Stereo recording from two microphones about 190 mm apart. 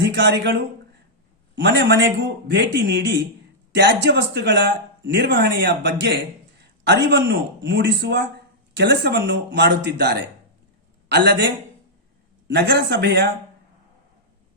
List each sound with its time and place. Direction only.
0.0 s a man's voice: 65° right (ahead or behind)